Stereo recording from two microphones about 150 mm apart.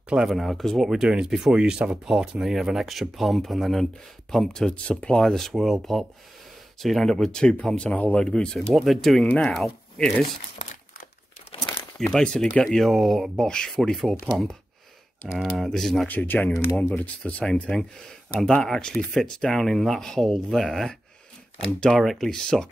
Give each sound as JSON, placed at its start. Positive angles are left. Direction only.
{"t": 0.1, "sound": "speech", "side_deg": -5}
{"t": 10.6, "sound": "crumpling", "side_deg": 55}
{"t": 12.0, "sound": "speech", "side_deg": 5}